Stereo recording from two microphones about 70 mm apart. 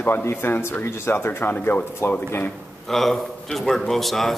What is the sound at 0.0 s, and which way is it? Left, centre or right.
Speech, left.